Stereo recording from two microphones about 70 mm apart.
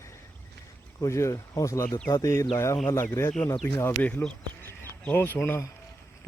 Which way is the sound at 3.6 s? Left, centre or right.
Left.